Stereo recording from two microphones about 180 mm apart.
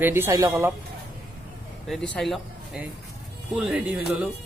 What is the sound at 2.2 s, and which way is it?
A man's voice, centre (ahead or behind).